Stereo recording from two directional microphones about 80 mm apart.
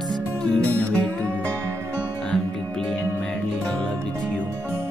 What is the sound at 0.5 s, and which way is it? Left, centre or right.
Music, centre.